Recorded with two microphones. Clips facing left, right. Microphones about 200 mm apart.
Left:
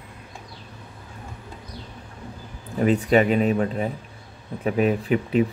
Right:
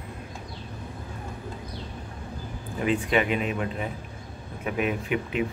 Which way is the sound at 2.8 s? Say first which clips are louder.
Left 6 dB; 40° left (ahead or behind).